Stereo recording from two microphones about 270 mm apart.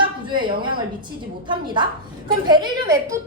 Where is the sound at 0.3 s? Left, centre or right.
Centre.